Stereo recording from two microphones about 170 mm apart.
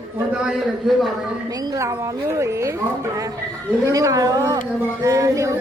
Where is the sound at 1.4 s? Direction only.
20° right (ahead or behind).